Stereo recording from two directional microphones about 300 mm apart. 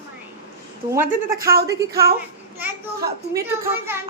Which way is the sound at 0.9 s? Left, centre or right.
Centre.